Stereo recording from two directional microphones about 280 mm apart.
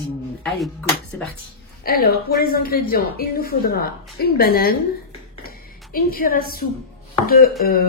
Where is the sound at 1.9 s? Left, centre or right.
Left.